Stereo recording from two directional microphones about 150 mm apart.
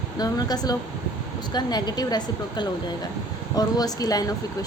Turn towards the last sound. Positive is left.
turn(degrees=25)  # may be behind; listen again after turning